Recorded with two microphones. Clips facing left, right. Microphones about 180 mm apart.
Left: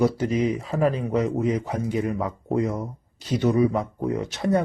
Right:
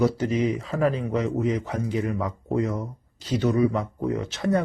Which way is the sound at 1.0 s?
30° left (ahead or behind).